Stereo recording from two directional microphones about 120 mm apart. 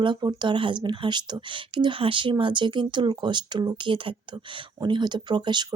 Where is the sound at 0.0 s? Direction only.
40° right (ahead or behind).